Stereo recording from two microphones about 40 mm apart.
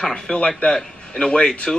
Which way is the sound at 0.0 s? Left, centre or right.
Centre.